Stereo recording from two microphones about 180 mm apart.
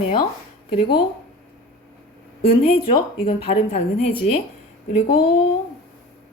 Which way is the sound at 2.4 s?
35° left (ahead or behind).